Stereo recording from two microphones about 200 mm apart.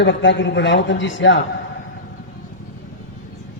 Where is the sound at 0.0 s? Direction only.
65° left (ahead or behind).